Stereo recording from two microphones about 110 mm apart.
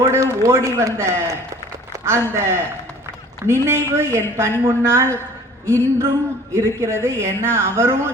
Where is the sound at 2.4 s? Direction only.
25° right (ahead or behind).